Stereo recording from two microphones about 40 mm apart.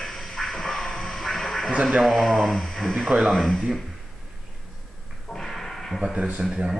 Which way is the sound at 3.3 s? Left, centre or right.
Centre.